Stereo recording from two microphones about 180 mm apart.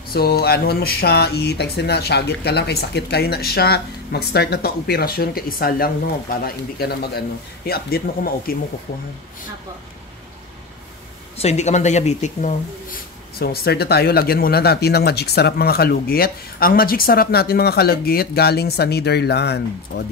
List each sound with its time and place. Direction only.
0.1 s speech: 60° left (ahead or behind)
11.3 s speech: 35° left (ahead or behind)
13.4 s speech: 60° left (ahead or behind)